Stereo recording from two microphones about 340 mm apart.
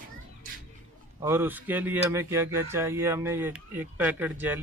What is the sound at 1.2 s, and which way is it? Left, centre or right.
Speech, centre.